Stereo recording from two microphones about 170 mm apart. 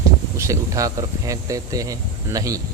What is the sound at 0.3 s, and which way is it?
Speech, 20° right (ahead or behind).